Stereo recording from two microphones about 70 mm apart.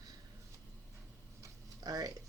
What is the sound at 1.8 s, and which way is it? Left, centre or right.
Speech, right.